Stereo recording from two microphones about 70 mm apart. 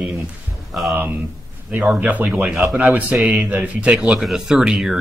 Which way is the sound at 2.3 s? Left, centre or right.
Centre.